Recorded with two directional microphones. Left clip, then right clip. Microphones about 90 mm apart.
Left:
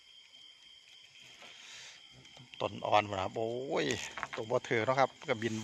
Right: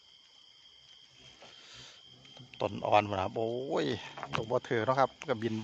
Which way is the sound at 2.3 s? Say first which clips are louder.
Right 2 dB; 45° right (ahead or behind).